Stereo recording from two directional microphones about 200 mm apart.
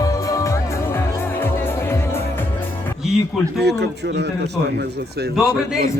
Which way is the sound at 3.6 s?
55° right (ahead or behind).